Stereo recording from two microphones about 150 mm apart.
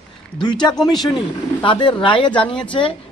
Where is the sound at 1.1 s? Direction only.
35° left (ahead or behind).